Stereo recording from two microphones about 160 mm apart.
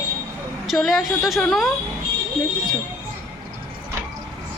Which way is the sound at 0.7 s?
Centre (ahead or behind).